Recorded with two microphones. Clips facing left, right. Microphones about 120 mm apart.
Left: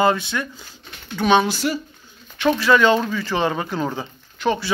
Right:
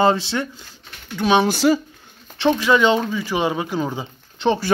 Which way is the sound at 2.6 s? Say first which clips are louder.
Left 2 dB; 20° right (ahead or behind).